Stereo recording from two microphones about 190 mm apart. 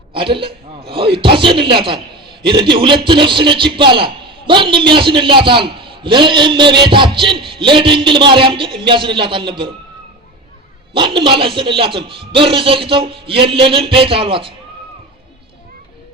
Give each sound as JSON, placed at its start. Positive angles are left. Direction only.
{"t": 0.1, "sound": "a man's voice", "side_deg": -25}
{"t": 10.9, "sound": "a man's voice", "side_deg": -25}